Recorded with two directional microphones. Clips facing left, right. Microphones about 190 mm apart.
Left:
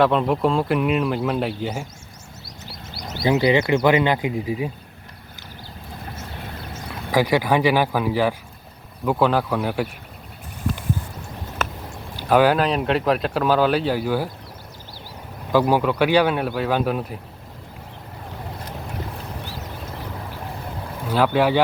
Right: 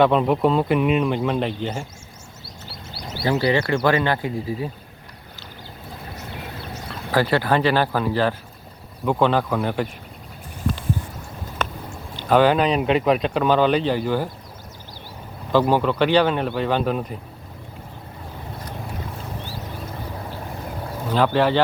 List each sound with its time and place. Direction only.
0.0 s speech: centre (ahead or behind)
3.2 s speech: 15° left (ahead or behind)
7.1 s speech: 15° left (ahead or behind)
11.5 s speech: 5° left (ahead or behind)
15.5 s speech: 10° left (ahead or behind)
21.1 s speech: 10° left (ahead or behind)